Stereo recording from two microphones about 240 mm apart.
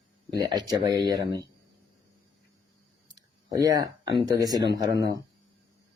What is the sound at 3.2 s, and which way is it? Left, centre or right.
A man's voice, centre.